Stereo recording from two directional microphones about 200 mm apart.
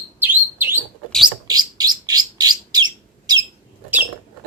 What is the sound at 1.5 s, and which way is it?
Bird, 20° right (ahead or behind).